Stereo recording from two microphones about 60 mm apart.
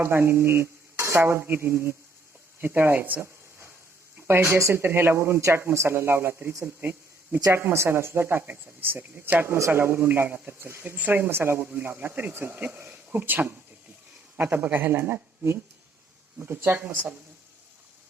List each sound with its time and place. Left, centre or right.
0.0 s speech: right
2.6 s a sound: right
4.2 s speech: right
4.8 s speech: right
6.7 s speech: right
7.5 s speech: right
8.4 s speech: right
9.6 s speech: right
12.5 s speech: right